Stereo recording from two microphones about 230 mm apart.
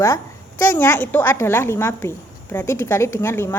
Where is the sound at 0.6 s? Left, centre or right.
Centre.